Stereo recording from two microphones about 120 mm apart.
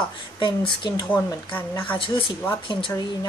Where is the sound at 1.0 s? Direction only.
15° left (ahead or behind).